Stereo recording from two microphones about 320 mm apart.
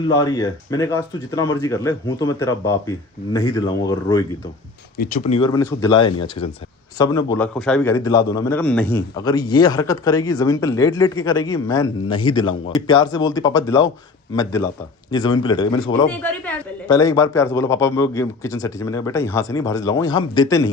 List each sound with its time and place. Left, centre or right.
0.0 s speech: centre
4.9 s speech: left